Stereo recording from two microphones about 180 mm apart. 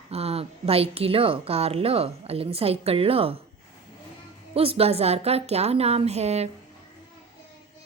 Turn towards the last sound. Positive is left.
turn(degrees=-35)  # may be behind; listen again after turning